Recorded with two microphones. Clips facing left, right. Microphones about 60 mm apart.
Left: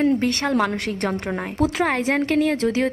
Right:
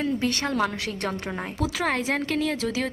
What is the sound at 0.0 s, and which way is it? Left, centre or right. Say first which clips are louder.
A woman's voice: left 6 dB; left.